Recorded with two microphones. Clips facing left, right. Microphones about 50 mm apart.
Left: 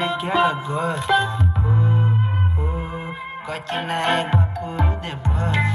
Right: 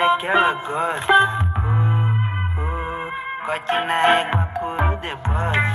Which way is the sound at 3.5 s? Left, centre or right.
Right.